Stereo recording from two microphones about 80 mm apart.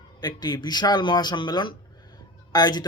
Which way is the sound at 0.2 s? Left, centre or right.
Left.